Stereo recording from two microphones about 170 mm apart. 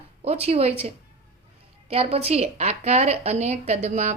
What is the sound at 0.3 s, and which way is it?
A woman's voice, 35° right (ahead or behind).